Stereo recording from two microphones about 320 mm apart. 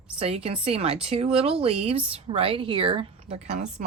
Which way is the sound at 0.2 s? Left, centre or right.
Centre.